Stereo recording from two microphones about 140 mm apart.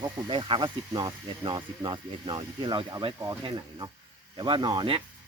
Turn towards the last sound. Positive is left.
turn(degrees=-30)  # may be behind; listen again after turning